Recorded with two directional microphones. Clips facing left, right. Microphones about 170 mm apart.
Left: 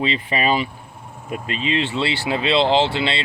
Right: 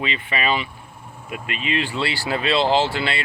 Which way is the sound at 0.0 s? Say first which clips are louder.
Left 4 dB; 35° left (ahead or behind).